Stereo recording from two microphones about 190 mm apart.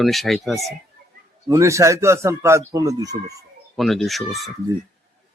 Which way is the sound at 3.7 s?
Centre (ahead or behind).